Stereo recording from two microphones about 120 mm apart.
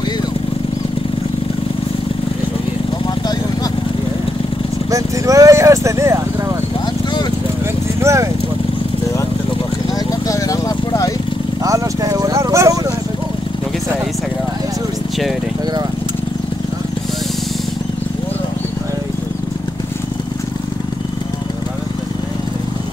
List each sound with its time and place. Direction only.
4.9 s speech: 25° right (ahead or behind)
8.0 s speech: 25° right (ahead or behind)
10.2 s vehicle: 30° left (ahead or behind)
11.6 s vehicle: 30° right (ahead or behind)